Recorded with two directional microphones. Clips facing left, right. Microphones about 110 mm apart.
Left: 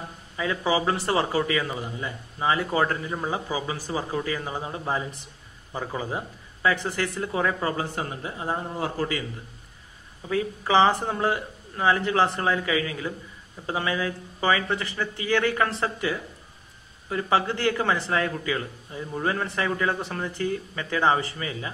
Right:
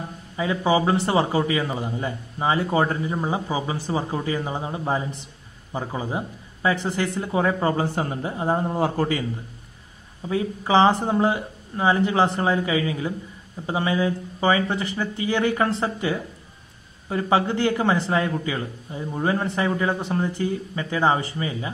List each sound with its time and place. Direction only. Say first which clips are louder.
0.4 s a man's voice: right 4 dB; 25° right (ahead or behind)
10.2 s a man's voice: right 2 dB; 20° right (ahead or behind)